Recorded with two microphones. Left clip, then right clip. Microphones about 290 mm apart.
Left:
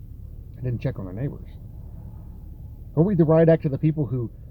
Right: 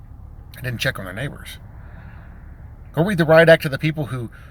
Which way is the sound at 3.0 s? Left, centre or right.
Right.